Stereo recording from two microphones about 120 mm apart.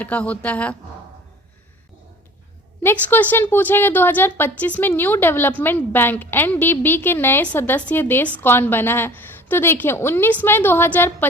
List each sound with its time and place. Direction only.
0.0 s a woman's voice: 10° left (ahead or behind)
2.8 s a woman's voice: 15° left (ahead or behind)